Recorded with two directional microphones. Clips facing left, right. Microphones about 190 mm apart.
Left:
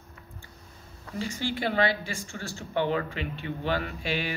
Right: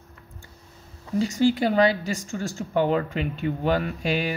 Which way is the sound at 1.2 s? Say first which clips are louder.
Right 9 dB; 40° right (ahead or behind).